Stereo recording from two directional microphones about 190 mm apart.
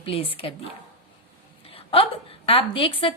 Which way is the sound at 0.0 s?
30° left (ahead or behind).